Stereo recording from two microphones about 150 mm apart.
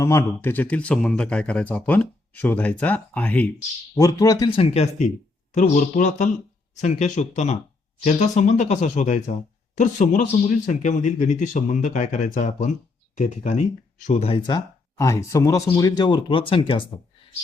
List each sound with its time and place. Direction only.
0.0 s speech: 20° left (ahead or behind)
3.9 s speech: 25° left (ahead or behind)